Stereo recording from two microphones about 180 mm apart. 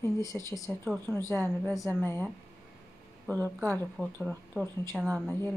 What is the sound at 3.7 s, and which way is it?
Speech, 5° left (ahead or behind).